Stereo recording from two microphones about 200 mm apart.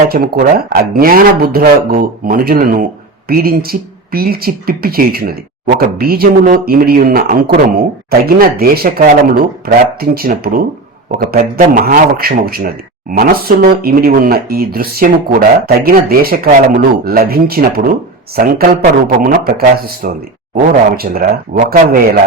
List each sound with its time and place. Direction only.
0.1 s a man's voice: 50° right (ahead or behind)